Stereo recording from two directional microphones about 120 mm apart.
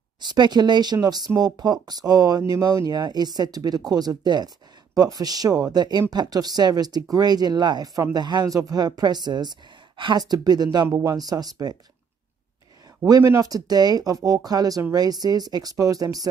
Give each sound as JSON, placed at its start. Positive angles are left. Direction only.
{"t": 0.2, "sound": "speech", "side_deg": -35}
{"t": 10.9, "sound": "speech", "side_deg": -20}
{"t": 11.1, "sound": "speech", "side_deg": -35}
{"t": 13.0, "sound": "speech", "side_deg": -30}